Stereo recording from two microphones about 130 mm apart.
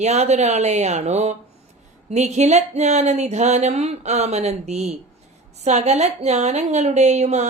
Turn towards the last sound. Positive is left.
turn(degrees=-60)  # may be behind; listen again after turning